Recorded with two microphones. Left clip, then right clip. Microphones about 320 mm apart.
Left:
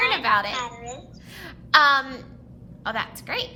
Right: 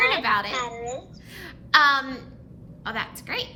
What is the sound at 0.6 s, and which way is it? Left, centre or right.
Speech, centre.